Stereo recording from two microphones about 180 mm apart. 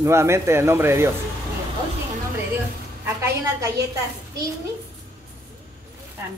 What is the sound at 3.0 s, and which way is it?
Speech, 15° right (ahead or behind).